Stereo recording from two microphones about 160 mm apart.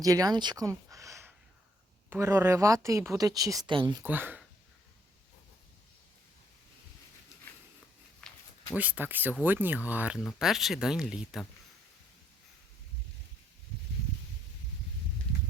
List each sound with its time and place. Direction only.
0.0 s speech: 20° right (ahead or behind)
4.0 s speech: 10° right (ahead or behind)
8.2 s a sound: 5° left (ahead or behind)
8.7 s speech: 10° right (ahead or behind)